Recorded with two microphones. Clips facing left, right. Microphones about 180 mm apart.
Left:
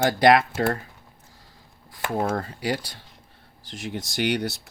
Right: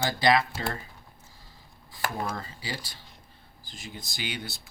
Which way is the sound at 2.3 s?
65° left (ahead or behind).